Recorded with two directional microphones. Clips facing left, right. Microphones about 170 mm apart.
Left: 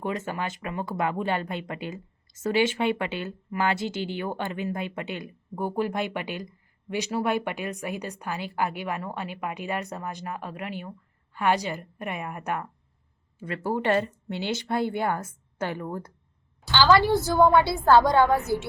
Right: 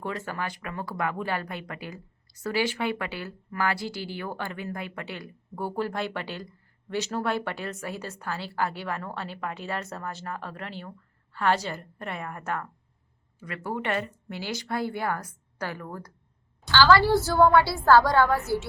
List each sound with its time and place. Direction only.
0.0 s speech: 20° left (ahead or behind)
13.4 s a woman's voice: 30° left (ahead or behind)